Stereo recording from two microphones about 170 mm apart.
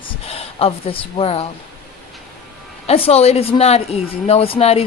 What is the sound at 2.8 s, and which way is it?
Speech, 35° left (ahead or behind).